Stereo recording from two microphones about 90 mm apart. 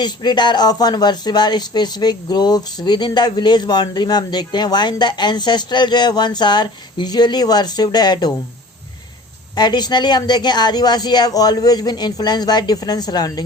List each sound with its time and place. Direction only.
0.0 s speech: 55° left (ahead or behind)
9.6 s speech: 50° left (ahead or behind)